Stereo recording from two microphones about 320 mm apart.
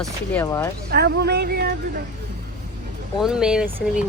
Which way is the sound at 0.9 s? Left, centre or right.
Right.